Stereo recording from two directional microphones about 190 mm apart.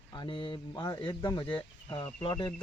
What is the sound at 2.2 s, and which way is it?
Speech, 25° left (ahead or behind).